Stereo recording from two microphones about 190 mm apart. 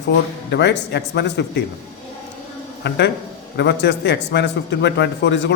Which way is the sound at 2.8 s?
70° left (ahead or behind).